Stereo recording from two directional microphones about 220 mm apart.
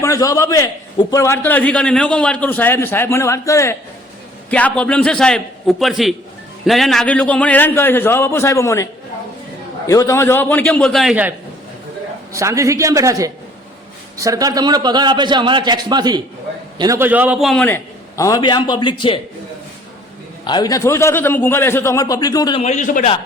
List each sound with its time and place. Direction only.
0.0 s a man's voice: 15° left (ahead or behind)
20.4 s a man's voice: 20° left (ahead or behind)
22.6 s a man's voice: 30° left (ahead or behind)